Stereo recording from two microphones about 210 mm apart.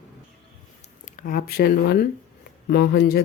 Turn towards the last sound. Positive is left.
turn(degrees=50)  # may be behind; listen again after turning